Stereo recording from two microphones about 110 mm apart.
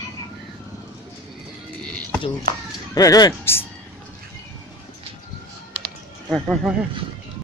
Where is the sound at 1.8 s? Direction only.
10° left (ahead or behind).